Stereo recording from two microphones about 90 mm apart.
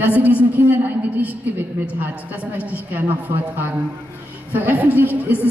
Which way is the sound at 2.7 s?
20° right (ahead or behind).